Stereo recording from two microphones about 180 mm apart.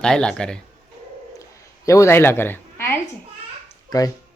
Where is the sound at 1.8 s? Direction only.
15° left (ahead or behind).